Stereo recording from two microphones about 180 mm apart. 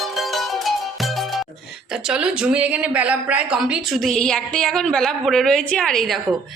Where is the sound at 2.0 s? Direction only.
5° right (ahead or behind).